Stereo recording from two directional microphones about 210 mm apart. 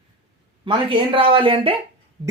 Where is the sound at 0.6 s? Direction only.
25° right (ahead or behind).